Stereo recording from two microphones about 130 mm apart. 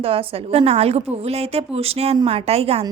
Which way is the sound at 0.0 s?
45° right (ahead or behind).